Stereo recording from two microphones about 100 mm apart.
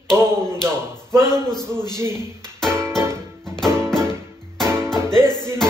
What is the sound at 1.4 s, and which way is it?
Speech, 5° left (ahead or behind).